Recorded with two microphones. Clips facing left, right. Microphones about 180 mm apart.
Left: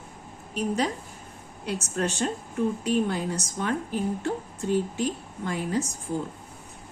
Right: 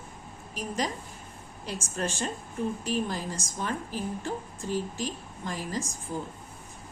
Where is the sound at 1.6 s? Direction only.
65° left (ahead or behind).